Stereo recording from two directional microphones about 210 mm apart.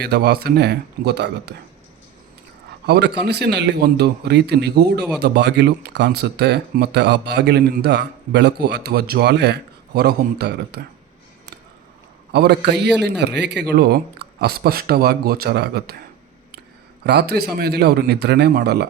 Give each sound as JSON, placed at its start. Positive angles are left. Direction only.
{"t": 0.0, "sound": "speech", "side_deg": -50}
{"t": 2.8, "sound": "speech", "side_deg": -50}
{"t": 12.3, "sound": "speech", "side_deg": -55}
{"t": 17.0, "sound": "speech", "side_deg": -50}